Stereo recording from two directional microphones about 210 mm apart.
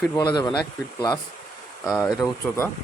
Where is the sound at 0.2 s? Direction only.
20° left (ahead or behind).